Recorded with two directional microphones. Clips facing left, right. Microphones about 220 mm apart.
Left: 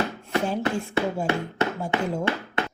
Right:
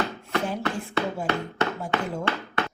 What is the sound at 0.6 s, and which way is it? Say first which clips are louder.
A woman's voice: left 3 dB; 20° left (ahead or behind).